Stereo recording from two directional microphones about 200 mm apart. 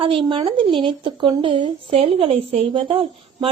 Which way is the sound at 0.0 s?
25° right (ahead or behind).